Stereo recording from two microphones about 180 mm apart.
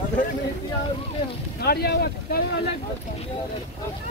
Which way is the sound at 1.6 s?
60° left (ahead or behind).